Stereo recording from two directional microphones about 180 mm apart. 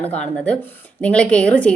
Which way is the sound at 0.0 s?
5° left (ahead or behind).